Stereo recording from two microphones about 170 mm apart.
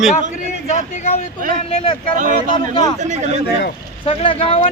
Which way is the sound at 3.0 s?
45° right (ahead or behind).